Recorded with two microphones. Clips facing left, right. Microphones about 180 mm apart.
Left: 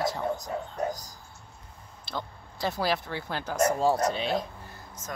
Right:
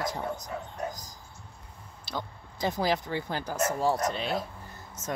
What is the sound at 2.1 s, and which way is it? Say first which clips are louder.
Speech: even; 15° right (ahead or behind).